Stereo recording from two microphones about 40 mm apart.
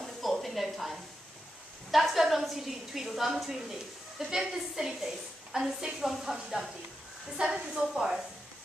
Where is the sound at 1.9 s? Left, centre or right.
Centre.